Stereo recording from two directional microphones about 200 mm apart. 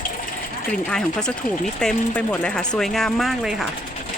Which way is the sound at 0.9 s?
5° left (ahead or behind).